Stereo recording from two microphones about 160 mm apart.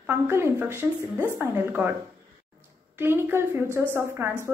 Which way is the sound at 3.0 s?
15° right (ahead or behind).